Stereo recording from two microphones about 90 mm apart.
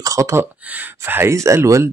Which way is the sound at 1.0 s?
30° right (ahead or behind).